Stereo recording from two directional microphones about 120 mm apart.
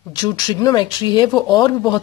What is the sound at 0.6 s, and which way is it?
Speech, 35° left (ahead or behind).